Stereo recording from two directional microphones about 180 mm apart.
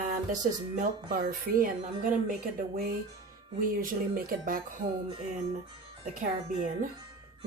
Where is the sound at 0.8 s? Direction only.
50° right (ahead or behind).